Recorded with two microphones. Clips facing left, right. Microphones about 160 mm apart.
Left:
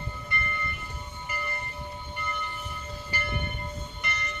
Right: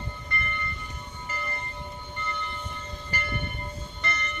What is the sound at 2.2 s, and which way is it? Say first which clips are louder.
Train: right 1 dB; 10° left (ahead or behind).